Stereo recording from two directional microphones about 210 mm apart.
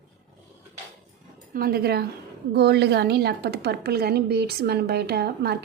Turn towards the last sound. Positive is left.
turn(degrees=-50)  # may be behind; listen again after turning